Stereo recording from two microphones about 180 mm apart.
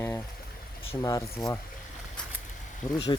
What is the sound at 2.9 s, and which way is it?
Speech, 25° left (ahead or behind).